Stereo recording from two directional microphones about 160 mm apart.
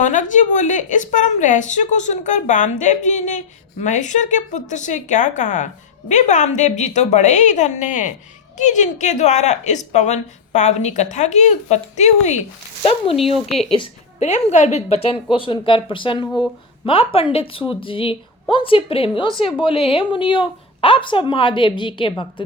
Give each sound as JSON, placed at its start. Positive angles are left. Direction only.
{"t": 0.0, "sound": "a woman's voice", "side_deg": 50}
{"t": 13.3, "sound": "speech", "side_deg": 0}
{"t": 13.7, "sound": "a woman's voice", "side_deg": 40}